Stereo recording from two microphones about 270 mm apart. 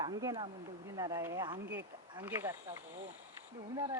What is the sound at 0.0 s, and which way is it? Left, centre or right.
Speech, centre.